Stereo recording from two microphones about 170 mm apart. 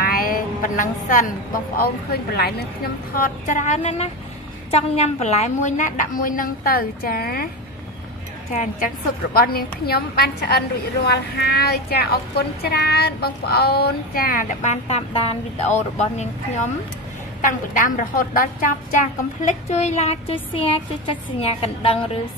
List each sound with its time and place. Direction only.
0.0 s a sound: 60° left (ahead or behind)
2.3 s speech: 65° left (ahead or behind)
3.4 s a woman's voice: 45° left (ahead or behind); by 7.4 s 60° left (ahead or behind)
8.5 s a woman's voice: 50° left (ahead or behind)
19.4 s speech: 40° left (ahead or behind)